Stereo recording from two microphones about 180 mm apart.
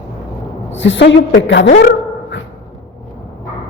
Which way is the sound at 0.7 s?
90° left.